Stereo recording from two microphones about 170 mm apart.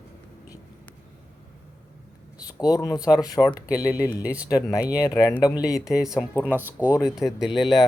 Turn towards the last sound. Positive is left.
turn(degrees=25)  # may be behind; listen again after turning